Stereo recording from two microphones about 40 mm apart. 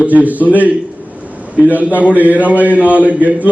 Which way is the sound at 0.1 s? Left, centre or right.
Right.